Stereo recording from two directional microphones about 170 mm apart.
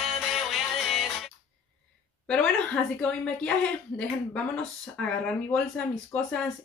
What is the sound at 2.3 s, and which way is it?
Speech, 5° left (ahead or behind).